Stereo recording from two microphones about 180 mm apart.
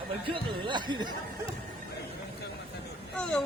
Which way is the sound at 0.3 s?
25° right (ahead or behind).